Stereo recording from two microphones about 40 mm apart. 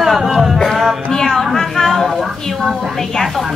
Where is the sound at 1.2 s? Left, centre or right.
Centre.